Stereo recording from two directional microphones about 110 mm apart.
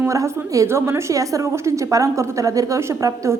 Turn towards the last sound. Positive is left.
turn(degrees=-30)  # may be behind; listen again after turning